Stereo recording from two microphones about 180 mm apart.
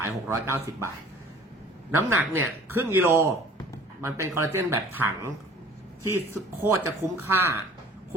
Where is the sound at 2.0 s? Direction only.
15° right (ahead or behind).